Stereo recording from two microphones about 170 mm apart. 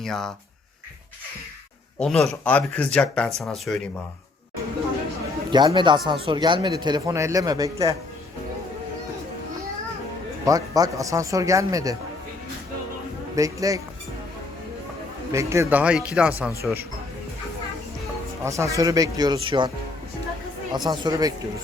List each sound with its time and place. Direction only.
0.0 s speech: centre (ahead or behind)
2.0 s speech: 5° left (ahead or behind)
5.5 s a man's voice: 25° right (ahead or behind)
10.4 s a man's voice: 20° right (ahead or behind)
13.3 s a man's voice: 20° right (ahead or behind)
15.3 s a man's voice: 15° right (ahead or behind)
18.4 s a man's voice: 20° right (ahead or behind)
20.7 s a man's voice: 25° right (ahead or behind)